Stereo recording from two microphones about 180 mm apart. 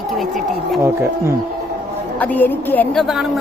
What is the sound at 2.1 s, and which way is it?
A woman's voice, 10° left (ahead or behind).